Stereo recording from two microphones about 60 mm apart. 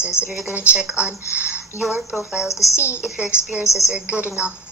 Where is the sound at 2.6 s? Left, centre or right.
Left.